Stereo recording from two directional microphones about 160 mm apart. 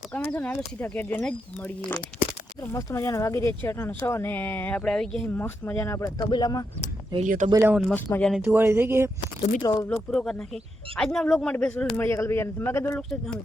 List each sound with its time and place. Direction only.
0.1 s speech: 10° left (ahead or behind)
7.3 s speech: 50° right (ahead or behind)
7.8 s speech: 10° left (ahead or behind)
8.3 s speech: 5° right (ahead or behind)
8.6 s speech: 15° right (ahead or behind)
9.6 s speech: 20° left (ahead or behind)
10.1 s speech: 5° left (ahead or behind)
13.0 s speech: 5° left (ahead or behind)